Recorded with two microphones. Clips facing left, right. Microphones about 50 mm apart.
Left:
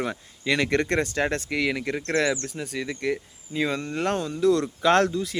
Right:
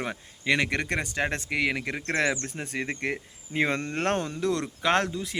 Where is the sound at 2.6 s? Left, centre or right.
Right.